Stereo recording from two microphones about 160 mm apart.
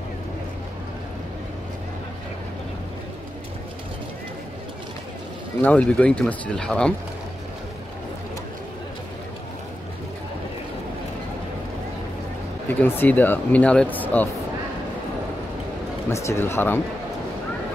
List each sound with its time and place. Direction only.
5.6 s speech: 10° left (ahead or behind)
12.6 s speech: 10° left (ahead or behind)
16.1 s speech: 20° left (ahead or behind)